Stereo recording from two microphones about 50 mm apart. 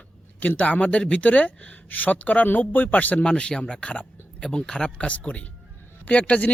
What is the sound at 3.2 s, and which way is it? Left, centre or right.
Speech, centre.